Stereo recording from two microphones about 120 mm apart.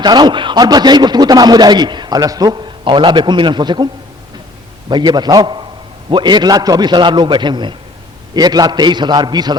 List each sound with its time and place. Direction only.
0.0 s a man's voice: 35° right (ahead or behind)
4.9 s a man's voice: 35° right (ahead or behind)